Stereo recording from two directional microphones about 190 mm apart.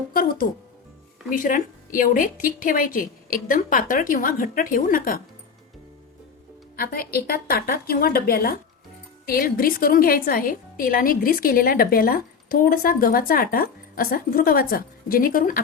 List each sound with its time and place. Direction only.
0.1 s a woman's voice: 50° left (ahead or behind)
6.7 s a woman's voice: 50° left (ahead or behind)